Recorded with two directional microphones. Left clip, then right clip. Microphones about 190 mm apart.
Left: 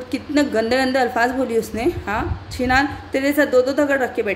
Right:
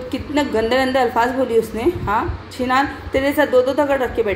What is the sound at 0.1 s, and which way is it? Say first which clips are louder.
A woman's voice: even; 30° left (ahead or behind).